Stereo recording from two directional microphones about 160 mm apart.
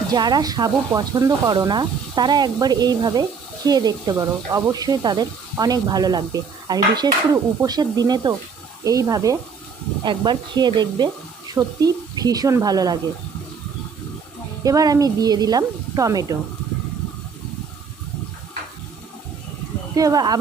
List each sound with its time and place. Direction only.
0.1 s speech: 25° right (ahead or behind)
14.6 s speech: 20° right (ahead or behind)
20.0 s speech: 20° right (ahead or behind)